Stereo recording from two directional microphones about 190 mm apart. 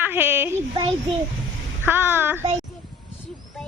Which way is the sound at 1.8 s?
10° right (ahead or behind).